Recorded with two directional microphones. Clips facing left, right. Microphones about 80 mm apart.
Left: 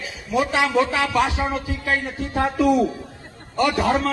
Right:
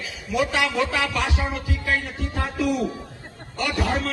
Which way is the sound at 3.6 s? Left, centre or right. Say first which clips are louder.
Left 6 dB; left.